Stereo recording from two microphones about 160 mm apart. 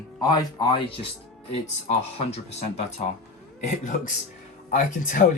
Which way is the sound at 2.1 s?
40° left (ahead or behind).